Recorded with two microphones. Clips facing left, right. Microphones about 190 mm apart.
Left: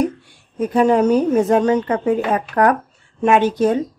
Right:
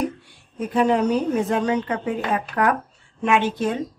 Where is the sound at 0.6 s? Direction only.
45° left (ahead or behind).